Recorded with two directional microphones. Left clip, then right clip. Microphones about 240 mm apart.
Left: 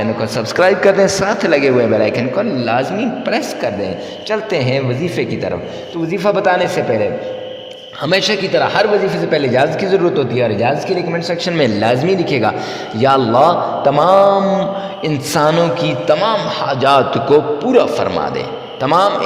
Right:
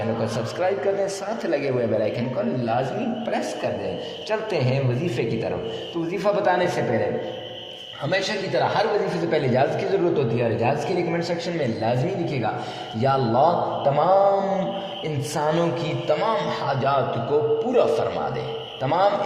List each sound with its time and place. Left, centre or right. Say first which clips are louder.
0.3 s a man's voice: left 16 dB; left
4.3 s mantra: left 8 dB; left
6.1 s a man's voice: left 8 dB; left
8.0 s a man's voice: left 10 dB; left
13.8 s mantra: left 8 dB; left
15.0 s a man's voice: left 11 dB; left